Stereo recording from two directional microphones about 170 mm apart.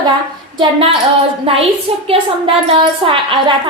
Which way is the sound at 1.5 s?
30° right (ahead or behind).